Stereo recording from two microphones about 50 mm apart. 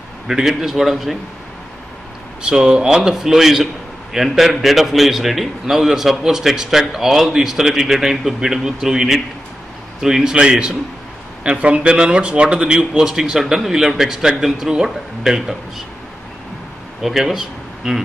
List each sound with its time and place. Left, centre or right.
0.3 s a man's voice: centre
2.4 s a man's voice: centre
17.0 s speech: centre